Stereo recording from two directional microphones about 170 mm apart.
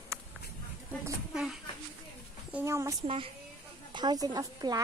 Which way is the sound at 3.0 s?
35° right (ahead or behind).